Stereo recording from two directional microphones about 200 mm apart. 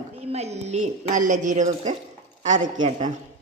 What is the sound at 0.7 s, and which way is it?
A woman's voice, 35° right (ahead or behind).